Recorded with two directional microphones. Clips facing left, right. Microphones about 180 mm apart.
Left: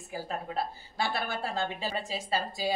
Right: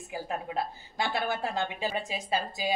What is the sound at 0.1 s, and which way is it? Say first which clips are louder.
A woman's voice: right 1 dB; 15° right (ahead or behind).